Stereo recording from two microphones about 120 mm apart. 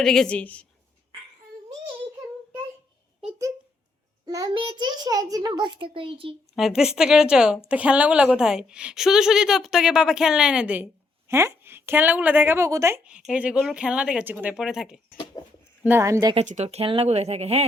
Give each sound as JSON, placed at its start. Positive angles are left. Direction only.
{"t": 0.0, "sound": "a woman's voice", "side_deg": 5}
{"t": 4.3, "sound": "a child's voice", "side_deg": -30}
{"t": 4.5, "sound": "a child's voice", "side_deg": -40}
{"t": 6.6, "sound": "a woman's voice", "side_deg": -5}
{"t": 11.3, "sound": "a woman's voice", "side_deg": -25}
{"t": 13.1, "sound": "speech", "side_deg": -10}
{"t": 14.5, "sound": "a woman's voice", "side_deg": -5}
{"t": 15.8, "sound": "a woman's voice", "side_deg": -20}
{"t": 16.3, "sound": "speech", "side_deg": -70}
{"t": 16.6, "sound": "speech", "side_deg": -50}